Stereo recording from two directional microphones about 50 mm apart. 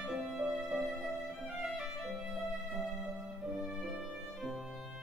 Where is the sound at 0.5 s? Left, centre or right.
Centre.